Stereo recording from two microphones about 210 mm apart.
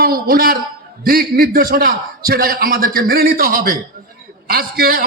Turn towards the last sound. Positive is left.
turn(degrees=-45)  # may be behind; listen again after turning